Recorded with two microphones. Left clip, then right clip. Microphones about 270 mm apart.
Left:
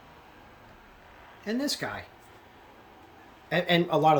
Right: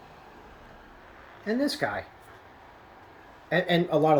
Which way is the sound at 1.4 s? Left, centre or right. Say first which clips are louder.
Right 3 dB; centre.